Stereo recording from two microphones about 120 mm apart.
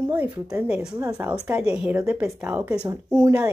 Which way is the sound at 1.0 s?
25° right (ahead or behind).